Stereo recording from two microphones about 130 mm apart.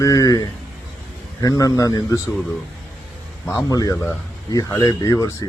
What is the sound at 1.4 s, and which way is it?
Speech, 30° left (ahead or behind).